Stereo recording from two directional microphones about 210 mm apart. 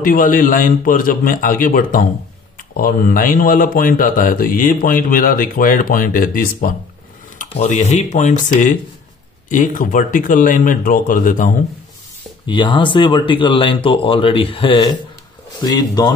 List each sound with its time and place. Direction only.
0.0 s a man's voice: 40° left (ahead or behind)
12.4 s speech: 20° left (ahead or behind)